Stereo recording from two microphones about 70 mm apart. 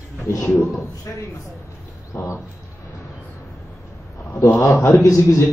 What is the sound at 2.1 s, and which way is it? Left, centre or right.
Speech, left.